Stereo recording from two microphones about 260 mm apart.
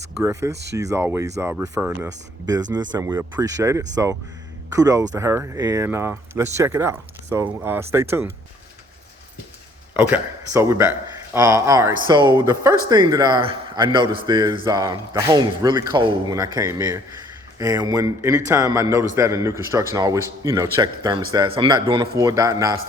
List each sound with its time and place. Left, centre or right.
0.2 s a man's voice: centre
9.9 s a man's voice: centre